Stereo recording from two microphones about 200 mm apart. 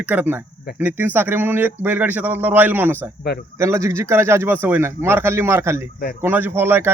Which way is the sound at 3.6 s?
15° right (ahead or behind).